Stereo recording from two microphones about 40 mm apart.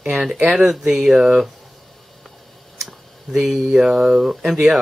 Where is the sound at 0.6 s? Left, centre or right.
Centre.